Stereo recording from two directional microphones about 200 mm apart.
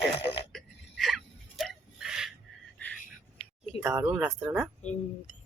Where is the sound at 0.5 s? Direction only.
Centre (ahead or behind).